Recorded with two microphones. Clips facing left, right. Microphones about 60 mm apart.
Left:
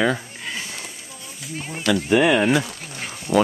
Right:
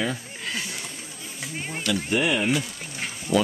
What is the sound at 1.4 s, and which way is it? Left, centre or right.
Speech, centre.